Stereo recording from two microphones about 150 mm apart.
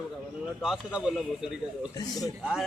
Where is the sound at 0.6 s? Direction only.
5° right (ahead or behind).